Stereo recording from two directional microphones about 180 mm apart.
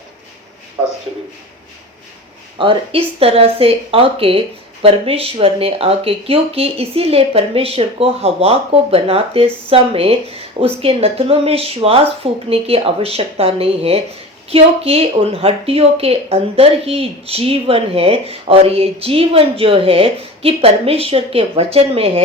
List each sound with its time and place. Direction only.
2.6 s speech: 30° right (ahead or behind)